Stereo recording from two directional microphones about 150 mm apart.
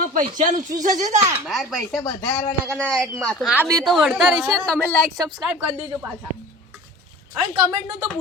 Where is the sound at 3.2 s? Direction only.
10° left (ahead or behind).